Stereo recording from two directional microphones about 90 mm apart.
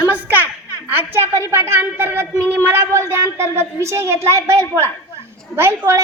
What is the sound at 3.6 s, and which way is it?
A woman's voice, 30° right (ahead or behind).